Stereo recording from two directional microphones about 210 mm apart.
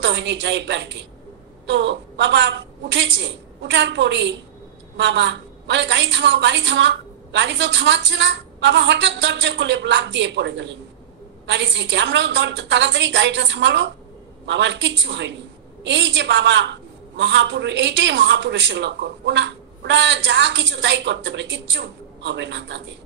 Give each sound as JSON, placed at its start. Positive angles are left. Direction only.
{"t": 0.0, "sound": "a woman's voice", "side_deg": -55}